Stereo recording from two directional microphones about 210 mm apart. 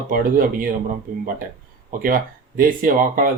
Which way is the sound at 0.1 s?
40° right (ahead or behind).